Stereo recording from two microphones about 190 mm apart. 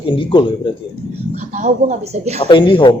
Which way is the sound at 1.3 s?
40° right (ahead or behind).